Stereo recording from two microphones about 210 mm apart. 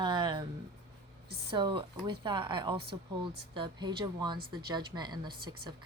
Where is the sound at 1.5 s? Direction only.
25° right (ahead or behind).